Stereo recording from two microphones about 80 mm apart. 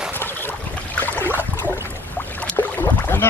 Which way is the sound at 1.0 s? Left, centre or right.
Left.